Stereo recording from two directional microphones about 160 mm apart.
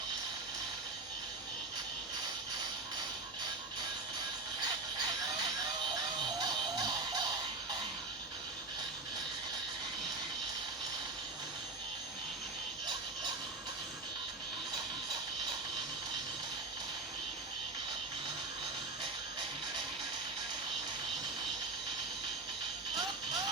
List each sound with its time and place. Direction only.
6.4 s music: 25° right (ahead or behind)